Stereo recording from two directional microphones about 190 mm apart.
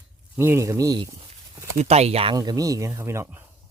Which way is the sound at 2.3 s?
20° right (ahead or behind).